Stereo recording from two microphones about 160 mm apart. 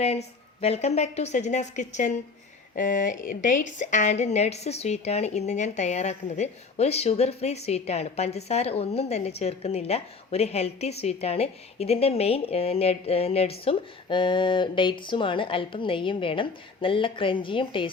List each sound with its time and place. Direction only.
0.0 s a woman's voice: 40° left (ahead or behind)